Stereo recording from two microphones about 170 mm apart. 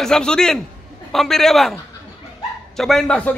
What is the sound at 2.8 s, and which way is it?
Speech, centre (ahead or behind).